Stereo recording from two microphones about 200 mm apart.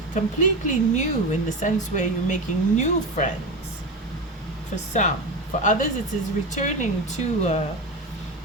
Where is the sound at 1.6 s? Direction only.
35° left (ahead or behind).